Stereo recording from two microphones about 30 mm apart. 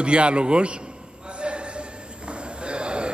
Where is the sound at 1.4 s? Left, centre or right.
Right.